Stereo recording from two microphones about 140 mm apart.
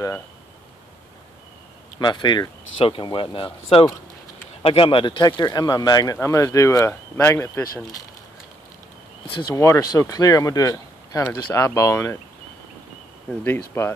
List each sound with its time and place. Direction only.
2.0 s speech: 30° left (ahead or behind); by 7.6 s 15° left (ahead or behind)
9.3 s speech: 30° left (ahead or behind)
9.6 s speech: 20° left (ahead or behind)
13.4 s speech: 15° left (ahead or behind)